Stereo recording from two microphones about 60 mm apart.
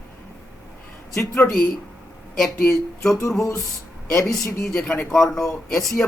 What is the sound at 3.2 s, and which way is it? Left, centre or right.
Music, left.